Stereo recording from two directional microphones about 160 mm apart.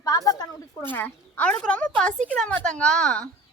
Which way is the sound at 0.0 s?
25° left (ahead or behind).